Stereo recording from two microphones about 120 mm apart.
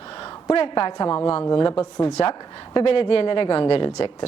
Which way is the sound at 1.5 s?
25° left (ahead or behind).